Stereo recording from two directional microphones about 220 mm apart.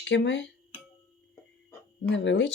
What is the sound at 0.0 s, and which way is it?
Speech, 55° left (ahead or behind).